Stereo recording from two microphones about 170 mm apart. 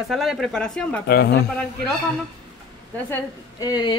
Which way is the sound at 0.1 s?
Centre (ahead or behind).